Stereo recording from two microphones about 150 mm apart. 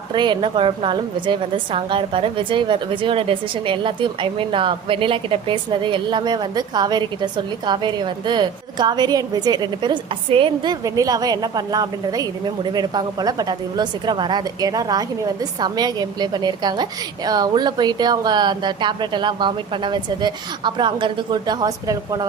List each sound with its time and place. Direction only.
0.1 s a woman's voice: 30° right (ahead or behind)